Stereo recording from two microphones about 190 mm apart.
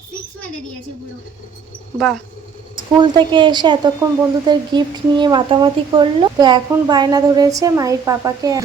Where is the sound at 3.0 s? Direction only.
25° right (ahead or behind).